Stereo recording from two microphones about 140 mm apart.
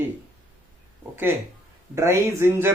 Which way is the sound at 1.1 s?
15° right (ahead or behind).